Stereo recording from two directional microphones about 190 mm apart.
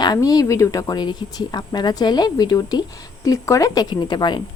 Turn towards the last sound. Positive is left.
turn(degrees=20)  # may be behind; listen again after turning